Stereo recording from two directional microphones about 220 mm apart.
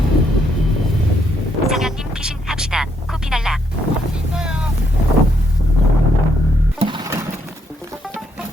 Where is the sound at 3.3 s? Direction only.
Centre (ahead or behind).